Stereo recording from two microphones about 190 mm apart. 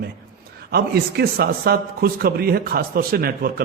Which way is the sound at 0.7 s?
55° right (ahead or behind).